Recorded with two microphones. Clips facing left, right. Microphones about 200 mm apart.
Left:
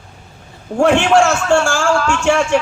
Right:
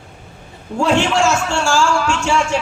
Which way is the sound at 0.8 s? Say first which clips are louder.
Left 4 dB; 55° left (ahead or behind).